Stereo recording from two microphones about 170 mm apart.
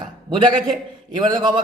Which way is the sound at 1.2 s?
25° right (ahead or behind).